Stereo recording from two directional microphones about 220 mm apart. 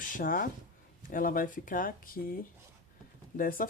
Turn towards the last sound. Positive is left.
turn(degrees=40)  # may be behind; listen again after turning